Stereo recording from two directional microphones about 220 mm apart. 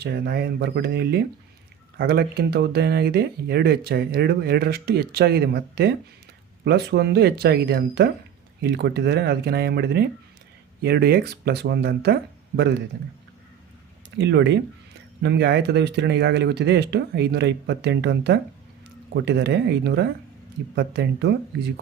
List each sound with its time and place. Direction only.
0.0 s speech: 50° right (ahead or behind)
14.2 s speech: 55° right (ahead or behind)